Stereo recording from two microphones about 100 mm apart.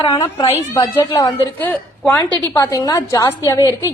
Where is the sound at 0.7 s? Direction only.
35° left (ahead or behind).